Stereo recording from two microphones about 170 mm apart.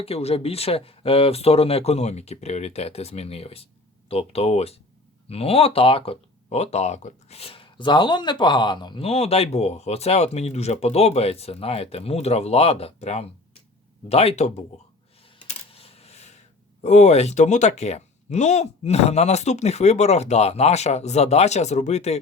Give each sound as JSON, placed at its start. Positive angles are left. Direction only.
{"t": 0.0, "sound": "speech", "side_deg": 35}
{"t": 15.4, "sound": "coin", "side_deg": 35}
{"t": 16.8, "sound": "speech", "side_deg": 40}